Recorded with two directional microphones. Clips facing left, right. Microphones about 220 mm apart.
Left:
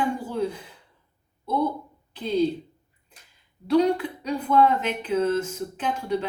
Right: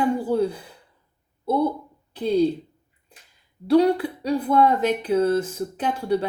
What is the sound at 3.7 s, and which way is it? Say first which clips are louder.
Speech: right 3 dB; 35° right (ahead or behind).